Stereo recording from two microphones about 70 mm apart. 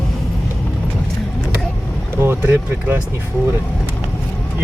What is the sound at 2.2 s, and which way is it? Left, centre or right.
Speech, right.